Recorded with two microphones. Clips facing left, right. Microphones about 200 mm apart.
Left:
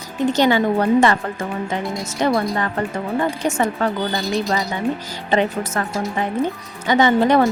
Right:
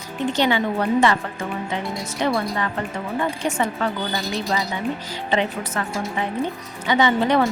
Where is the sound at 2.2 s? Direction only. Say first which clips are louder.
Left 3 dB; 45° left (ahead or behind).